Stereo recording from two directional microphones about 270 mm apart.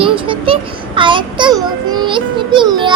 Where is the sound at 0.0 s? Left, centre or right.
Centre.